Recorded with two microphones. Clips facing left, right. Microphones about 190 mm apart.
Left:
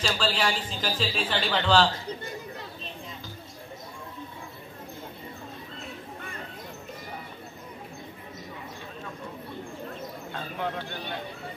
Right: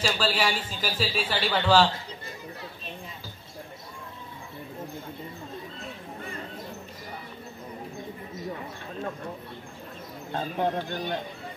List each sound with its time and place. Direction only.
0.0 s a man's voice: 5° right (ahead or behind)
10.3 s speech: 45° right (ahead or behind)